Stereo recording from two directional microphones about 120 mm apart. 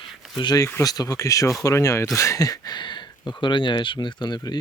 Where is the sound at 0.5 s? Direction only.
25° left (ahead or behind).